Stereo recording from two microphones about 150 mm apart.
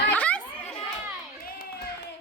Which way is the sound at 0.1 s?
10° left (ahead or behind).